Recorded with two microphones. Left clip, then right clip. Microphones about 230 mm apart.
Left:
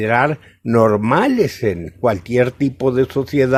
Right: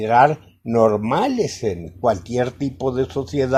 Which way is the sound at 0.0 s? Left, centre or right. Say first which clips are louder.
Right 2 dB; left.